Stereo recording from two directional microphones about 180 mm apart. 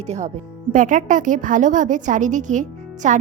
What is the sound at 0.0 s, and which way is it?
A woman's voice, 35° right (ahead or behind).